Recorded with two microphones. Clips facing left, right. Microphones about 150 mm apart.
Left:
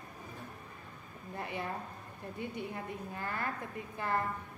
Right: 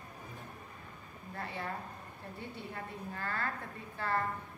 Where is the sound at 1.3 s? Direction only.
15° left (ahead or behind).